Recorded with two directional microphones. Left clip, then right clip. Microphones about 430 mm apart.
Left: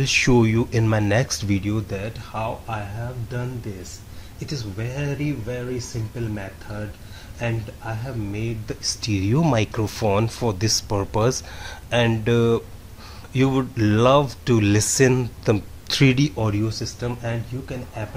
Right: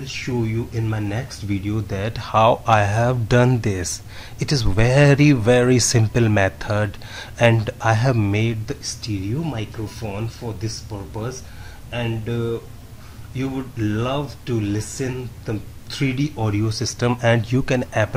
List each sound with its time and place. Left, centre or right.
0.0 s speech: left
1.9 s speech: centre
2.3 s speech: right
9.0 s speech: left
16.6 s speech: centre
17.0 s speech: right